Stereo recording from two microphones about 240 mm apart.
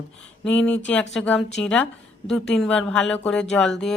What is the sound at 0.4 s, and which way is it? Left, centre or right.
Speech, centre.